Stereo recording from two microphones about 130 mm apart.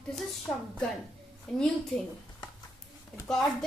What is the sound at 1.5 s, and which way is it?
Speech, 5° left (ahead or behind).